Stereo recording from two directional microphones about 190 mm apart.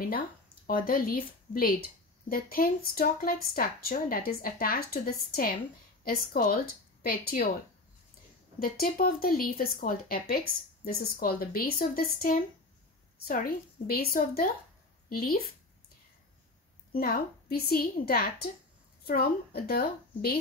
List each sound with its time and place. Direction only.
0.7 s a woman's voice: 50° left (ahead or behind)
8.5 s a woman's voice: 50° left (ahead or behind)
16.9 s a woman's voice: 50° left (ahead or behind)